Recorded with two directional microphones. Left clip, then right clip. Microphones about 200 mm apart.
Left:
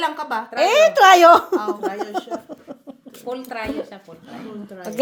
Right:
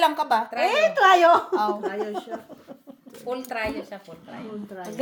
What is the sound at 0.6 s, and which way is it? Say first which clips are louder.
A woman's voice: left 8 dB; 65° left (ahead or behind).